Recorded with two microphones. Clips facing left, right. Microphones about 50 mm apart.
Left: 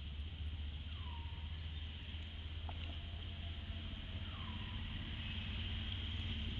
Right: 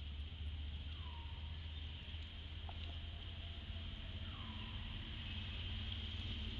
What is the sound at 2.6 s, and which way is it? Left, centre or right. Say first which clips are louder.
Boat: left 3 dB; left.